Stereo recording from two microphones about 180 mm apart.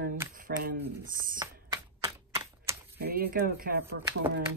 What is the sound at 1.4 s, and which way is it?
Typewriter, 20° right (ahead or behind).